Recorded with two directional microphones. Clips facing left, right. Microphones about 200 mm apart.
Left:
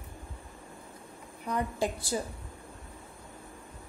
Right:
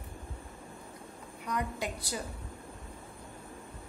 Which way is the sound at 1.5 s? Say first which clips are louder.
Left 4 dB; 30° left (ahead or behind).